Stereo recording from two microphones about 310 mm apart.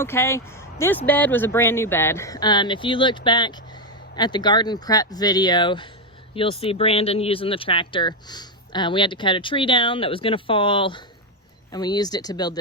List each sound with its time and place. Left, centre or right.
0.0 s speech: centre